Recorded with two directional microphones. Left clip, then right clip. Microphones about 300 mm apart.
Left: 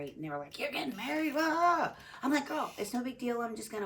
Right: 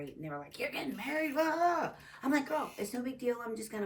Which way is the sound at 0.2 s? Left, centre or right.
Centre.